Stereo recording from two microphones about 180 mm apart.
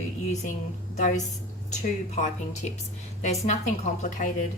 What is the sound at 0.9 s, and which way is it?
A woman's voice, 40° left (ahead or behind).